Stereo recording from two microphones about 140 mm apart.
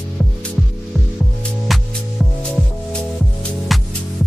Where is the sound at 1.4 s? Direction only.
Centre (ahead or behind).